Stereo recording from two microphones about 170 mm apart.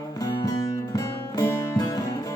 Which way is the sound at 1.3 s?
20° left (ahead or behind).